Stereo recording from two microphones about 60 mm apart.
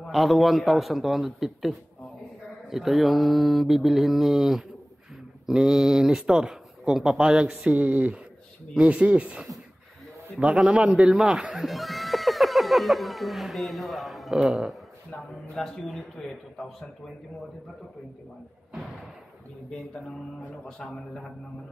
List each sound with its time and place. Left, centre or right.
0.1 s mantra: centre
5.5 s speech: centre
7.7 s speech: right; by 11.4 s centre
11.5 s speech: centre
15.5 s a man's voice: centre
20.6 s a man's voice: centre